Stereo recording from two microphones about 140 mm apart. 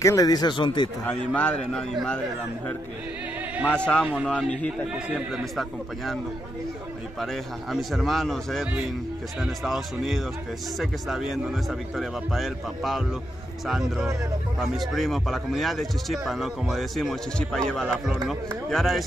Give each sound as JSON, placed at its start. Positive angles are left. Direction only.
{"t": 0.0, "sound": "speech", "side_deg": 25}
{"t": 1.0, "sound": "a man's voice", "side_deg": 10}
{"t": 3.6, "sound": "a man's voice", "side_deg": 10}
{"t": 4.0, "sound": "a man's voice", "side_deg": -10}
{"t": 4.3, "sound": "a man's voice", "side_deg": 5}
{"t": 7.7, "sound": "speech", "side_deg": 0}